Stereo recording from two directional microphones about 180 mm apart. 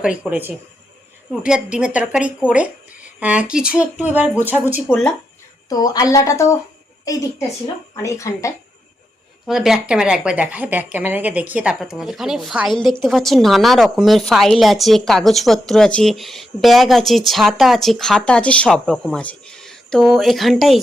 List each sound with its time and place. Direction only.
0.0 s a woman's voice: 5° right (ahead or behind)
5.6 s a woman's voice: 20° left (ahead or behind)
9.5 s a woman's voice: centre (ahead or behind)